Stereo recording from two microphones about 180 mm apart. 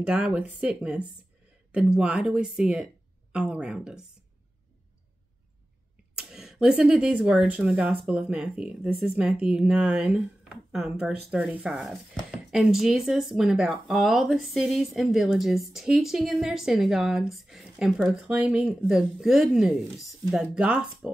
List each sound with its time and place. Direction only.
0.0 s speech: 5° right (ahead or behind)
6.1 s speech: 5° right (ahead or behind)